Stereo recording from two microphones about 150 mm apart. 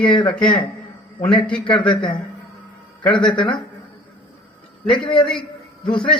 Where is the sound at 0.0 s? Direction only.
30° left (ahead or behind).